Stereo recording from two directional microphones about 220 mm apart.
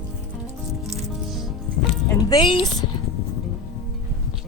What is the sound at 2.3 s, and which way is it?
Speech, 20° left (ahead or behind).